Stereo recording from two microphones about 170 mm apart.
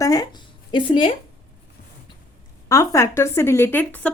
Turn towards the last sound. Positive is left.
turn(degrees=10)  # may be behind; listen again after turning